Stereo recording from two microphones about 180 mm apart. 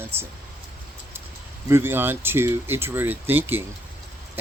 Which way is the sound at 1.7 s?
10° right (ahead or behind).